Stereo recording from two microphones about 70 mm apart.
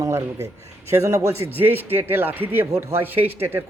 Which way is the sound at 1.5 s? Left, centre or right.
Right.